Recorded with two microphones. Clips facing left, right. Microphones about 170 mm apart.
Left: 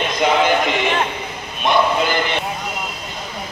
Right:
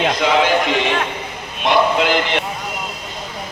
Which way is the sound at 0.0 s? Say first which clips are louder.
Right 1 dB; 90° right.